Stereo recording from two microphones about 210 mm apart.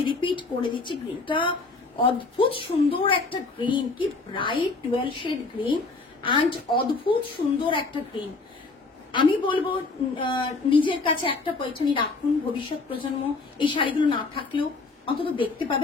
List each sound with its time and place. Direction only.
0.0 s speech: 25° left (ahead or behind)
13.6 s speech: 25° left (ahead or behind)